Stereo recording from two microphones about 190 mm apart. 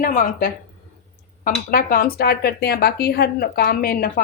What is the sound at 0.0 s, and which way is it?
A woman's voice, 45° left (ahead or behind).